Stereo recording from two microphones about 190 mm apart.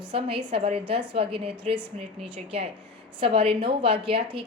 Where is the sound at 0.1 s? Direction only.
30° right (ahead or behind).